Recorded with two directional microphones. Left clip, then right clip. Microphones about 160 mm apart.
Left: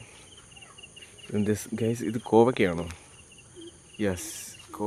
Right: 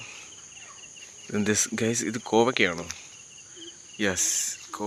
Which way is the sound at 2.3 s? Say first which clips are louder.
Left 1 dB; 15° left (ahead or behind).